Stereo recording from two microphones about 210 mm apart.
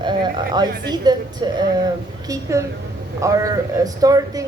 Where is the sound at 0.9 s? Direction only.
20° right (ahead or behind).